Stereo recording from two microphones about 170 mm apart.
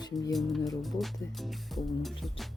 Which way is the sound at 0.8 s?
Centre (ahead or behind).